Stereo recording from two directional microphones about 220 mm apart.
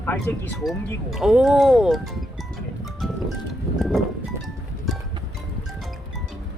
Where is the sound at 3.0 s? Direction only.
Centre (ahead or behind).